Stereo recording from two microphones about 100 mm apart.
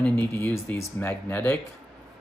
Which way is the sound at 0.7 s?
20° left (ahead or behind).